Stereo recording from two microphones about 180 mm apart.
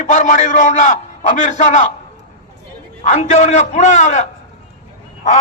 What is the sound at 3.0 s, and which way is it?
Speech, 40° left (ahead or behind).